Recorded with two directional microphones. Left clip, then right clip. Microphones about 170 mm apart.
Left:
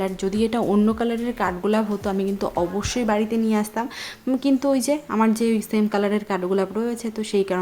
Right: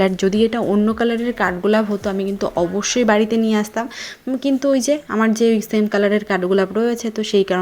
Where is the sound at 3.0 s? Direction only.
20° right (ahead or behind).